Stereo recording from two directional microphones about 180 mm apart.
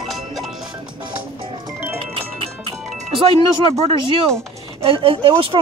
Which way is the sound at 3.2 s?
30° right (ahead or behind).